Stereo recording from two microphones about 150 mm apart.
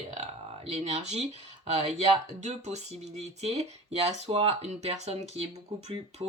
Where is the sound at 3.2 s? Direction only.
45° right (ahead or behind).